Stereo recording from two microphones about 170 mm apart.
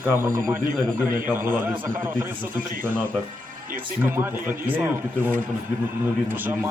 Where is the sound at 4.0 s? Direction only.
15° right (ahead or behind).